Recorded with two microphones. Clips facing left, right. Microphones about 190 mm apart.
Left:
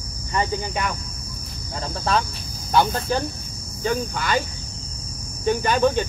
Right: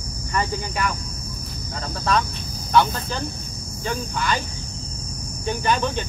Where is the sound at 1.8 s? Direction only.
30° left (ahead or behind).